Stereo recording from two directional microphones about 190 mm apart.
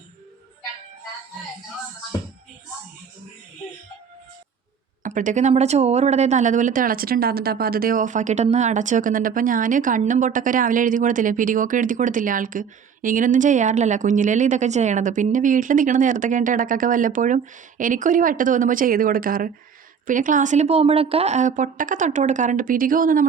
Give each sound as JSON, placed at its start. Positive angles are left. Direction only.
{"t": 5.0, "sound": "speech", "side_deg": -40}